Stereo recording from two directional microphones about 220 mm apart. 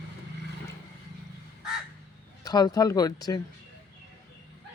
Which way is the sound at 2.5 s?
15° left (ahead or behind).